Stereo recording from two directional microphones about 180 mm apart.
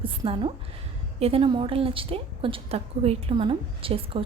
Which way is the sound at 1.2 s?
30° right (ahead or behind).